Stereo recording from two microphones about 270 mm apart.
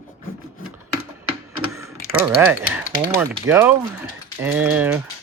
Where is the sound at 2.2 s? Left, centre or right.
Centre.